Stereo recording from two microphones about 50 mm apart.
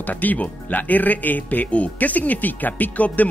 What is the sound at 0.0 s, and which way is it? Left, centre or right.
Speech, left.